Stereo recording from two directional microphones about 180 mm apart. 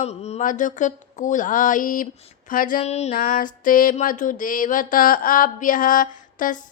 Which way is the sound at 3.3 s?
50° left (ahead or behind).